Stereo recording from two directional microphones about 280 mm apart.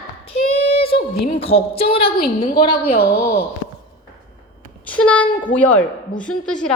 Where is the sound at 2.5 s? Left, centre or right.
Left.